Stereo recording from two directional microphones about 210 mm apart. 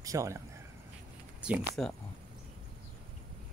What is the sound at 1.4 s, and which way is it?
Speech, 5° right (ahead or behind).